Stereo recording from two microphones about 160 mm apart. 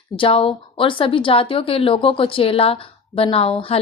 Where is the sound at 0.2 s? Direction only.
35° left (ahead or behind).